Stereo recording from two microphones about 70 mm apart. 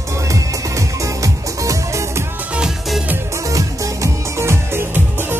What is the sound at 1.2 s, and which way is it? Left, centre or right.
Music, right.